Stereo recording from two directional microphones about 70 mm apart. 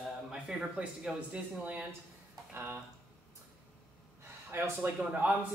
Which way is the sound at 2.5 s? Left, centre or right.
Right.